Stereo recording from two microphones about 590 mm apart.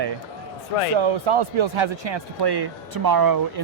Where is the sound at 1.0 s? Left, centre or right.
Right.